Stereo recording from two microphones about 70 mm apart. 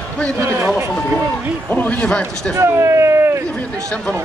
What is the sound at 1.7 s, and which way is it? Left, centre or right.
Speech, centre.